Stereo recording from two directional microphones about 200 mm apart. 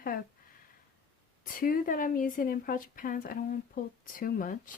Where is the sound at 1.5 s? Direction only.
45° left (ahead or behind).